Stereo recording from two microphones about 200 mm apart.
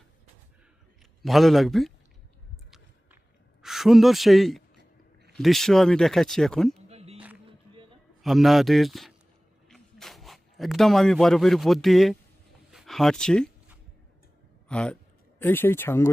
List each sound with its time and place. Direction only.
1.2 s speech: centre (ahead or behind)
2.6 s a sound: centre (ahead or behind)
3.6 s speech: centre (ahead or behind)
4.8 s a sound: 55° right (ahead or behind)
5.4 s speech: centre (ahead or behind)
6.8 s music: 30° right (ahead or behind)
8.2 s speech: centre (ahead or behind)
14.7 s speech: 5° left (ahead or behind)